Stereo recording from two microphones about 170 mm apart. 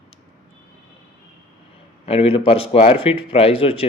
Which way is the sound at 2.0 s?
35° left (ahead or behind).